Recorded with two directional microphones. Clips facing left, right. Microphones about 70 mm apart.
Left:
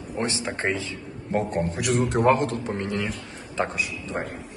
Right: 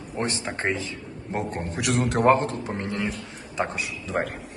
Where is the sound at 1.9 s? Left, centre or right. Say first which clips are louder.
Even; right.